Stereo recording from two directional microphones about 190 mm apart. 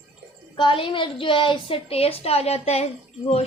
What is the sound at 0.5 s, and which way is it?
A woman's voice, 25° left (ahead or behind).